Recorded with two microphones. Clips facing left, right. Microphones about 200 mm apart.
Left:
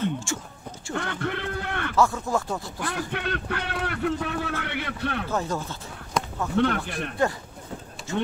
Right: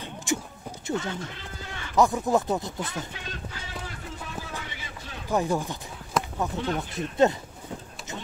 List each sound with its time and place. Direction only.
0.0 s a sound: 15° right (ahead or behind)
0.9 s a sound: 65° left (ahead or behind)
2.0 s speech: 15° right (ahead or behind)
3.1 s speech: 65° left (ahead or behind)
5.3 s speech: 15° right (ahead or behind)
6.2 s basketball bounce: 5° right (ahead or behind)
6.5 s speech: 65° left (ahead or behind)
7.2 s speech: 20° right (ahead or behind)
8.1 s a sound: 20° right (ahead or behind)